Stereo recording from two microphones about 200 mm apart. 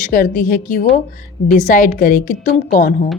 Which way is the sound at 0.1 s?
45° left (ahead or behind).